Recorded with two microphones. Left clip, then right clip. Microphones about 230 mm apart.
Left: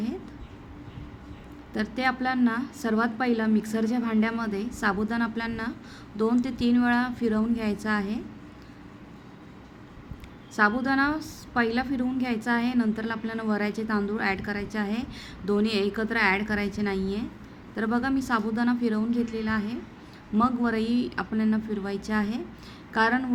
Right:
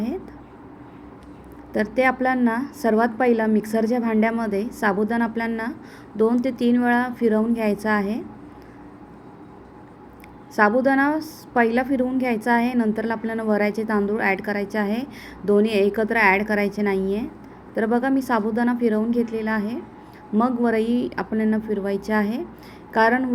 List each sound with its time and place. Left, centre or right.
1.7 s a woman's voice: centre
10.8 s a woman's voice: centre
20.8 s speech: left
21.2 s a woman's voice: centre